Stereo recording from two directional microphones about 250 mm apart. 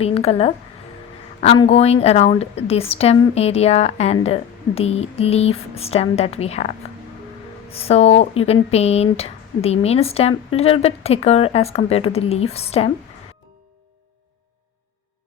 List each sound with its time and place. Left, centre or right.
0.0 s a woman's voice: left
7.7 s a woman's voice: left